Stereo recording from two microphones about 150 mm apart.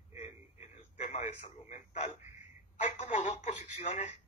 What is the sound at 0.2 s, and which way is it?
Radio, 50° left (ahead or behind).